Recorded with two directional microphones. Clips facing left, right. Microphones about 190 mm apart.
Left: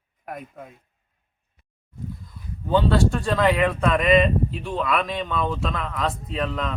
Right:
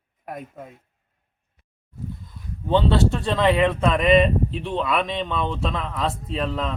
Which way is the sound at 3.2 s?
25° right (ahead or behind).